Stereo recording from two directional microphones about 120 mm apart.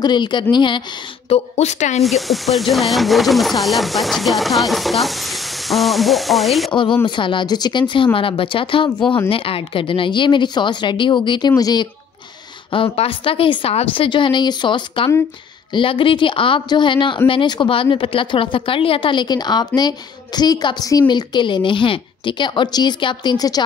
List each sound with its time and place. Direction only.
0.0 s a woman's voice: 40° left (ahead or behind)
1.3 s a woman's voice: 70° left (ahead or behind)
2.0 s speech: centre (ahead or behind)
6.7 s a woman's voice: 45° left (ahead or behind)
12.7 s a woman's voice: 50° left (ahead or behind); by 23.6 s 30° left (ahead or behind)